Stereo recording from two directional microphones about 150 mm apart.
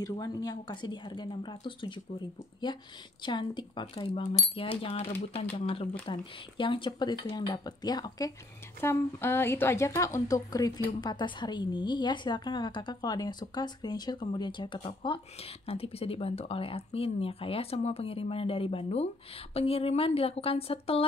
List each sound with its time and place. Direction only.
0.0 s a woman's voice: 25° left (ahead or behind)
8.8 s a woman's voice: 15° left (ahead or behind); by 21.0 s 40° left (ahead or behind)